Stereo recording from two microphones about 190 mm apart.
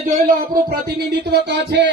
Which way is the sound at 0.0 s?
45° right (ahead or behind).